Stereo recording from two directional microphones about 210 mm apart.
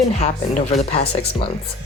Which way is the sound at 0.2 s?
30° left (ahead or behind).